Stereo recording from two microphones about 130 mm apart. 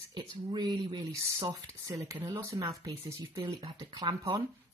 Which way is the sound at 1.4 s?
20° right (ahead or behind).